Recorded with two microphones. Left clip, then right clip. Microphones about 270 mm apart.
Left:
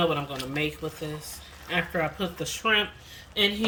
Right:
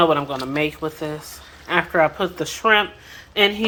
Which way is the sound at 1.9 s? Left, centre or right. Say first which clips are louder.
Right 11 dB; right.